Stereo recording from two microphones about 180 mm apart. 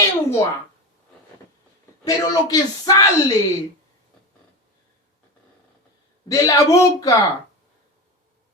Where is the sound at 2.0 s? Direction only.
20° left (ahead or behind).